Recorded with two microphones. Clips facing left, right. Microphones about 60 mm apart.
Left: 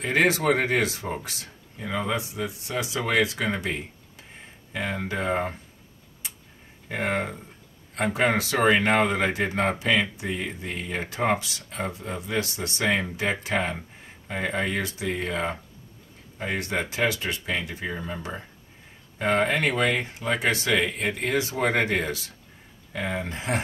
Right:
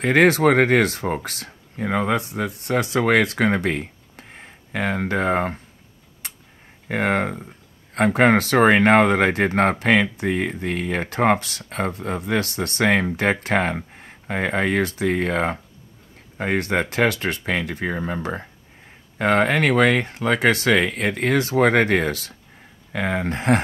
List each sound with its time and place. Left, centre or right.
0.0 s speech: right
6.2 s a sound: right
6.9 s speech: right